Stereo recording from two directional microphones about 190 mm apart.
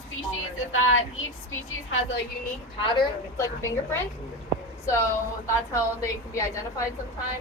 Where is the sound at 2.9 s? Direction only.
15° left (ahead or behind).